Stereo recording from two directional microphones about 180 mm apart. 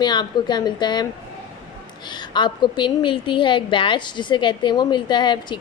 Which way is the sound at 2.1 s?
25° left (ahead or behind).